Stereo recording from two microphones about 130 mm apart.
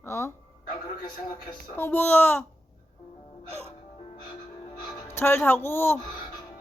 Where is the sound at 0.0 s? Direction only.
20° left (ahead or behind).